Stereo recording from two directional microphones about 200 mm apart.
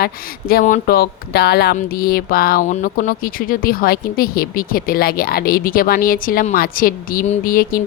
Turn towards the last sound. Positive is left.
turn(degrees=45)  # may be behind; listen again after turning